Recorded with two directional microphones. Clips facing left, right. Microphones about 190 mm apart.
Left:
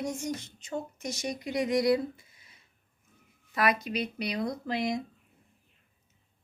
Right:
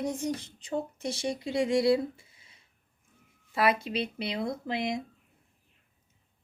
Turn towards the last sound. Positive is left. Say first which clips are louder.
# left 1 dB
turn(degrees=-25)  # may be behind; listen again after turning